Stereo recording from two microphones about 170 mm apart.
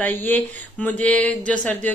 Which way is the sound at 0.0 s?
10° left (ahead or behind).